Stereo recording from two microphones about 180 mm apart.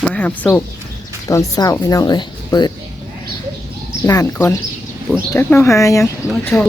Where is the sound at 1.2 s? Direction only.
15° left (ahead or behind).